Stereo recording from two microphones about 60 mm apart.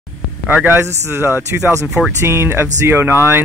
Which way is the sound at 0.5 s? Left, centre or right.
Right.